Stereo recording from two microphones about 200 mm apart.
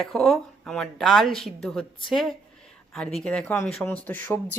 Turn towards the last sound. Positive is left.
turn(degrees=10)  # may be behind; listen again after turning